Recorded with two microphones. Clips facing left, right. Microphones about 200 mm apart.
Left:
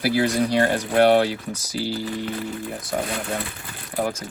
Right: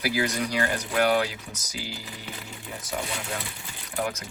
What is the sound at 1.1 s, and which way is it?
Speech, 35° left (ahead or behind).